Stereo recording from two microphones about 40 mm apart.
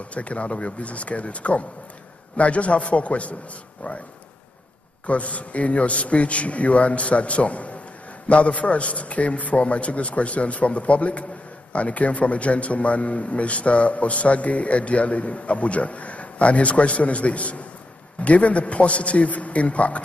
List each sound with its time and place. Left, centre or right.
0.1 s a man's voice: left
5.0 s a man's voice: left